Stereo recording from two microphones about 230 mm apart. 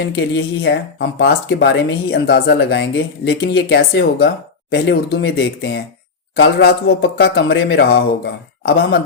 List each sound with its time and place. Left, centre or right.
0.1 s speech: left